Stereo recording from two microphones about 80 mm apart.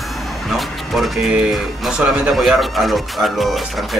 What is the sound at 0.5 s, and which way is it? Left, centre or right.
Speech, centre.